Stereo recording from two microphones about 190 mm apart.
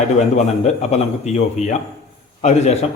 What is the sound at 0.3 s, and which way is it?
Speech, 35° left (ahead or behind).